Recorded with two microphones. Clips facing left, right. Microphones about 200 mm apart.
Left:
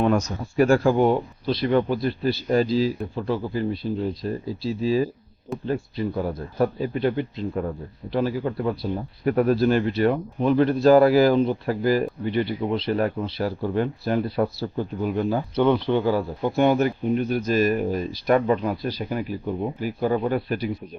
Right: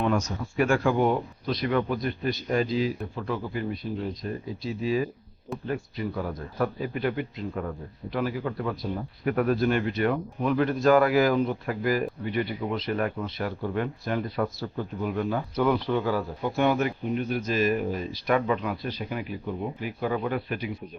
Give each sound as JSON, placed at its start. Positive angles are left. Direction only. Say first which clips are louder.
{"t": 0.0, "sound": "speech", "louder": "left 4 dB", "side_deg": 40}